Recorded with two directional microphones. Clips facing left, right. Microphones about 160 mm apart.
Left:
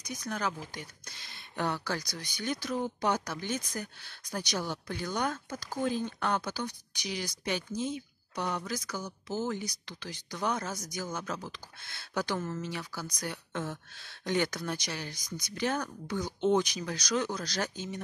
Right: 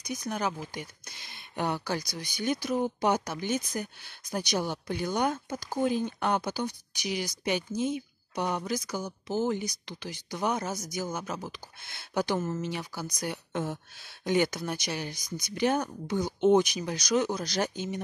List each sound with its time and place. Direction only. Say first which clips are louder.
0.0 s speech: right 3 dB; 10° right (ahead or behind)